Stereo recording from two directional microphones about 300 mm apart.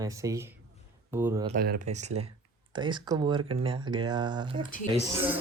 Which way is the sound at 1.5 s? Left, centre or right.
Right.